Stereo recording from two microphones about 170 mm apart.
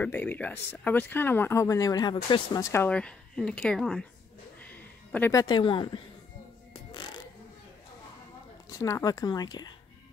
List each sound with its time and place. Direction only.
0.0 s speech: 10° left (ahead or behind); by 6.0 s 30° left (ahead or behind)
6.7 s music: 25° left (ahead or behind)
8.6 s speech: 20° left (ahead or behind)